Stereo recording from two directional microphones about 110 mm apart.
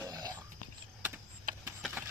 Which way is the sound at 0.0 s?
35° right (ahead or behind).